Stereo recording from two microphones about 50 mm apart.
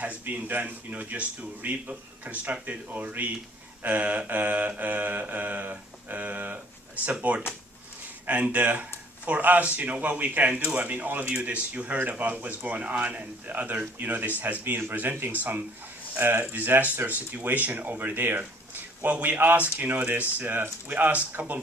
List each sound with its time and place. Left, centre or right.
0.0 s speech: right
14.6 s speech: right
16.4 s speech: right